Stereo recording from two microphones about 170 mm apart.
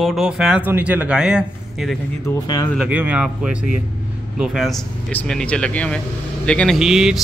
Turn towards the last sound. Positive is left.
turn(degrees=-5)  # may be behind; listen again after turning